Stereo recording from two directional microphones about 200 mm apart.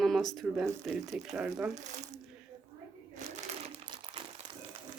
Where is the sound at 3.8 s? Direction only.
20° right (ahead or behind).